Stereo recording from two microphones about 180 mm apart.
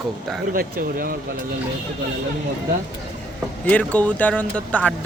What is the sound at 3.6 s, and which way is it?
Speech, 10° left (ahead or behind).